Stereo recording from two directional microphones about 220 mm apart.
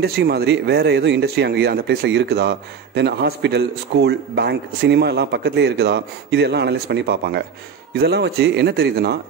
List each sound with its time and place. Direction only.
0.0 s speech: 45° right (ahead or behind)